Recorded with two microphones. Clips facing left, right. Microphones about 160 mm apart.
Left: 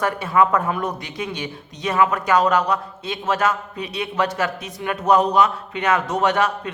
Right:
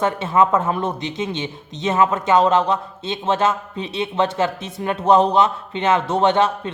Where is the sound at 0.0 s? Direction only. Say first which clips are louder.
Right 1 dB; 25° right (ahead or behind).